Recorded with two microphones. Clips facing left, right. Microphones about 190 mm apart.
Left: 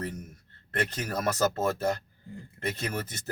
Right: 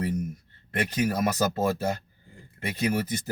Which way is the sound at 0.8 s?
10° right (ahead or behind).